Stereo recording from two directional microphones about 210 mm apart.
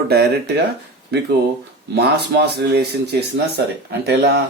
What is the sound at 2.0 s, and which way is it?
Speech, 50° right (ahead or behind).